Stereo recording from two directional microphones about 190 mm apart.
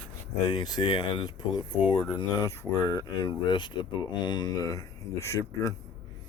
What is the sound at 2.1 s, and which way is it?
Speech, 20° left (ahead or behind).